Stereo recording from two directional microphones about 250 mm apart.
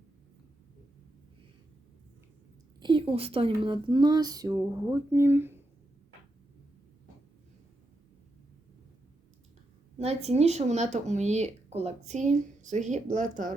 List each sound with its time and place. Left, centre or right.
2.8 s speech: centre
10.0 s speech: right